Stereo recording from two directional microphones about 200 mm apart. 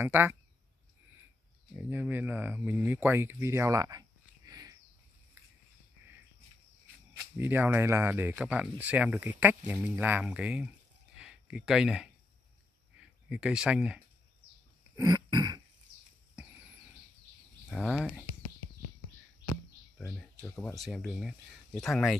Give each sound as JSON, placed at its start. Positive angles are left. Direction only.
{"t": 0.0, "sound": "speech", "side_deg": -10}
{"t": 1.8, "sound": "speech", "side_deg": -10}
{"t": 4.5, "sound": "a sound", "side_deg": -20}
{"t": 7.3, "sound": "speech", "side_deg": -10}
{"t": 13.3, "sound": "speech", "side_deg": -5}
{"t": 15.0, "sound": "throat clearing", "side_deg": -20}
{"t": 17.6, "sound": "speech", "side_deg": -5}
{"t": 20.1, "sound": "speech", "side_deg": 5}